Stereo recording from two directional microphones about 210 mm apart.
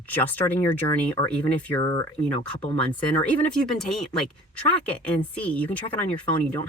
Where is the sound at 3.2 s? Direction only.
5° left (ahead or behind).